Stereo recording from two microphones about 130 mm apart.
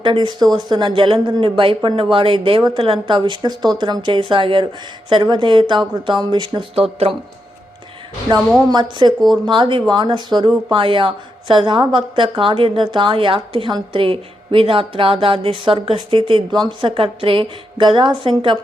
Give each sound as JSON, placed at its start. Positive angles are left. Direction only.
{"t": 0.0, "sound": "a woman's voice", "side_deg": -35}
{"t": 8.7, "sound": "a woman's voice", "side_deg": -35}